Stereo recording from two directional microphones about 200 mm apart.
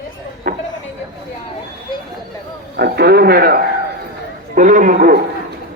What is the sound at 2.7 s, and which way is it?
A man's voice, 55° right (ahead or behind).